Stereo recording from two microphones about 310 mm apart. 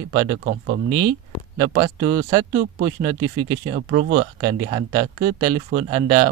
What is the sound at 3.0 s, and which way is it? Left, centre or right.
Speech, centre.